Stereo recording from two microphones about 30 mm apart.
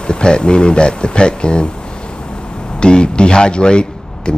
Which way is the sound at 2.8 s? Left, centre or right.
Left.